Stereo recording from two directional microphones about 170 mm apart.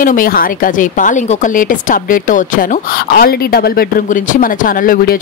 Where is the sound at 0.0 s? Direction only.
55° left (ahead or behind).